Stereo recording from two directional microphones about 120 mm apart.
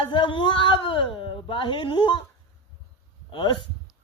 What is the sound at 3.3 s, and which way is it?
Speech, 40° left (ahead or behind).